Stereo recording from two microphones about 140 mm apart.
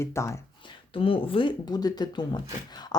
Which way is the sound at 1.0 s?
40° left (ahead or behind).